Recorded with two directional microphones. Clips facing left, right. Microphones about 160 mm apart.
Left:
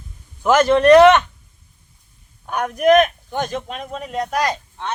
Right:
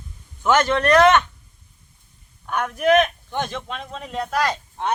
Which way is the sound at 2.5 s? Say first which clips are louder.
Left 4 dB; 40° left (ahead or behind).